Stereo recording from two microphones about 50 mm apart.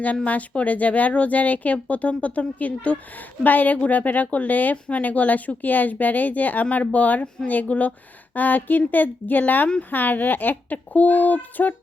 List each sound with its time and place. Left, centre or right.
0.3 s speech: left